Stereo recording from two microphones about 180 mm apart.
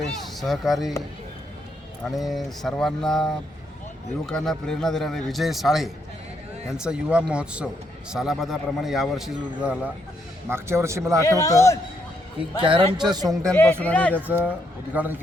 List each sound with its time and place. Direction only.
0.3 s a man's voice: centre (ahead or behind)
2.0 s a man's voice: centre (ahead or behind); by 11.2 s 15° right (ahead or behind)
11.3 s a man's voice: 20° left (ahead or behind)
12.6 s a man's voice: 30° right (ahead or behind)
13.3 s speech: 5° left (ahead or behind)
14.3 s speech: 10° right (ahead or behind)